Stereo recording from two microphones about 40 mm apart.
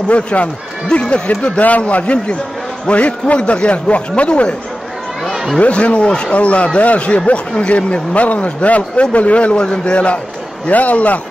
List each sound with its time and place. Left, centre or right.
0.1 s speech: left
0.8 s speech: left
5.6 s speech: left
6.0 s speech: left
6.3 s speech: left